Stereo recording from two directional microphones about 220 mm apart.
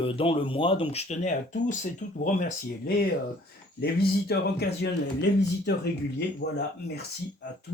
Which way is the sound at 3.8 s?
45° left (ahead or behind).